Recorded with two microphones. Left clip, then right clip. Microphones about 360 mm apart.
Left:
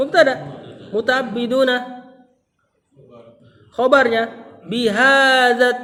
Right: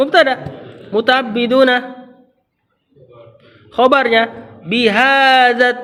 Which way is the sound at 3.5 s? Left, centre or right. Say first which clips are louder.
Right 3 dB; right.